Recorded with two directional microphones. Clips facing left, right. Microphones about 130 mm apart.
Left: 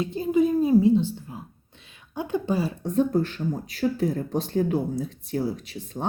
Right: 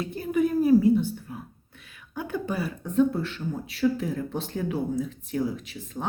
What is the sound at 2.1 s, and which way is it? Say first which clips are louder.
Speech: left 4 dB; 20° left (ahead or behind).